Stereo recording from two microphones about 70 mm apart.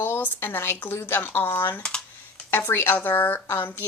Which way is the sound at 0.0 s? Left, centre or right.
Left.